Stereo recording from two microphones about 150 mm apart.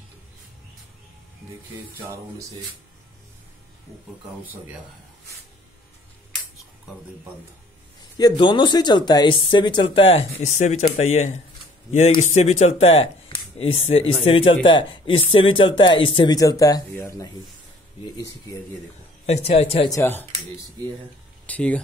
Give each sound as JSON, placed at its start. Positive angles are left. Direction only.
{"t": 2.0, "sound": "speech", "side_deg": -20}
{"t": 8.0, "sound": "speech", "side_deg": 30}
{"t": 19.2, "sound": "speech", "side_deg": 45}
{"t": 19.9, "sound": "speech", "side_deg": 15}
{"t": 21.5, "sound": "speech", "side_deg": 10}